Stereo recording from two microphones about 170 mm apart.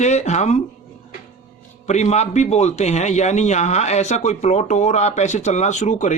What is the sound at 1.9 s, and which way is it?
A man's voice, 40° left (ahead or behind).